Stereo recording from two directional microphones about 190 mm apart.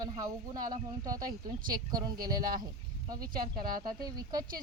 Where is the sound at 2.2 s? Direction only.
50° right (ahead or behind).